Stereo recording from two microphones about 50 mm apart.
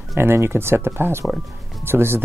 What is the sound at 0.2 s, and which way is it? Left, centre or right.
Speech, right.